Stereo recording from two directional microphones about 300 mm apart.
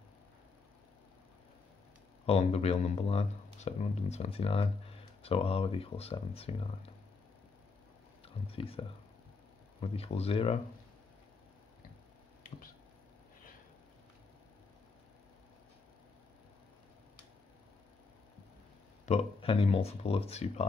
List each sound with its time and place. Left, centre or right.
2.2 s speech: centre
8.5 s speech: centre
19.0 s speech: centre